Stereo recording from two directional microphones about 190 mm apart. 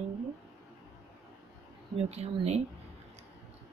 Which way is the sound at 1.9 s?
35° right (ahead or behind).